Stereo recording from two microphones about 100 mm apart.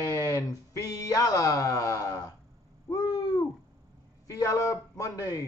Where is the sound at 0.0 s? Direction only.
35° left (ahead or behind).